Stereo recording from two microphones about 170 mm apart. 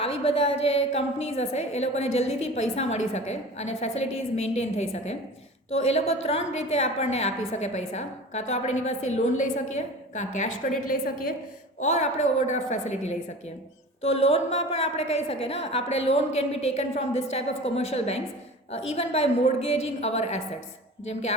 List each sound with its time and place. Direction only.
0.0 s a woman's voice: 35° left (ahead or behind)